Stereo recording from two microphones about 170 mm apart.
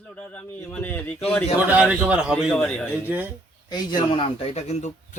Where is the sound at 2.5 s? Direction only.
5° left (ahead or behind).